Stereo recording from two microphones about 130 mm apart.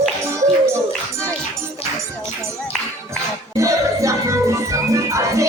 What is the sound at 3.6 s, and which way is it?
Music, 25° right (ahead or behind).